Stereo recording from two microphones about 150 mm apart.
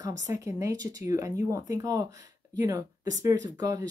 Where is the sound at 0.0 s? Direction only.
20° right (ahead or behind).